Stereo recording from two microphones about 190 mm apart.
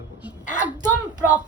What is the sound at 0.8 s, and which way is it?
Speech, 20° right (ahead or behind).